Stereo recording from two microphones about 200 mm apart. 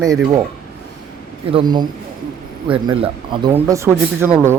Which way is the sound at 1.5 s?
20° right (ahead or behind).